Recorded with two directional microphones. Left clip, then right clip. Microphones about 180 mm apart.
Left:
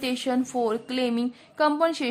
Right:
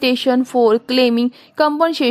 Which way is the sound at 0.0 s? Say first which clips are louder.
Right 11 dB; 40° right (ahead or behind).